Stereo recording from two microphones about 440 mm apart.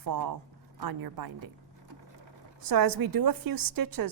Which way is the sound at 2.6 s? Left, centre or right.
Right.